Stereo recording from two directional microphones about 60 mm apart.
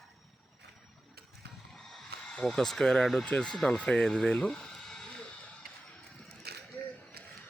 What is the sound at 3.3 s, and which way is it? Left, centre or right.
Speech, centre.